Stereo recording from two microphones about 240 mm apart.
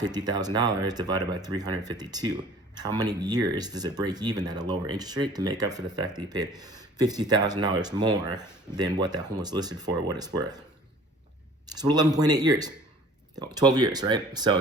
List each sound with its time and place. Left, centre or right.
0.0 s speech: centre
11.6 s speech: centre